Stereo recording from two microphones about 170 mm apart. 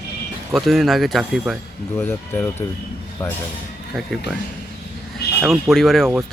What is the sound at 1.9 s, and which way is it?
Speech, 10° left (ahead or behind).